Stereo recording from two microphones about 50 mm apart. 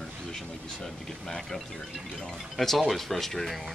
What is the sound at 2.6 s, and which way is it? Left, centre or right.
Speech, centre.